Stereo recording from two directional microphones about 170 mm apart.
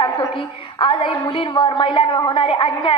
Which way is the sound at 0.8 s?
30° left (ahead or behind).